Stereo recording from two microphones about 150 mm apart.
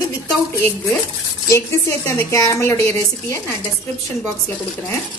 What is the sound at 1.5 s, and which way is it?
A woman's voice, 20° left (ahead or behind).